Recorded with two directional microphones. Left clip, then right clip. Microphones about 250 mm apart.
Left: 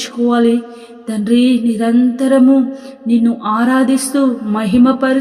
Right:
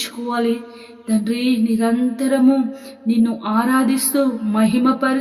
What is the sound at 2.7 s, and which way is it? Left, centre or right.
Music, centre.